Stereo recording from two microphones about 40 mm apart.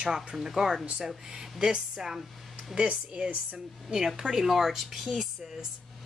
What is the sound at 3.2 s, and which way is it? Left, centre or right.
Speech, right.